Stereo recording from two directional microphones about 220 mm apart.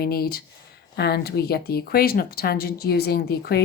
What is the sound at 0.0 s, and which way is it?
Speech, 45° left (ahead or behind).